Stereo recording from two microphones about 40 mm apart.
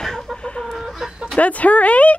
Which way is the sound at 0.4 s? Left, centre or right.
Left.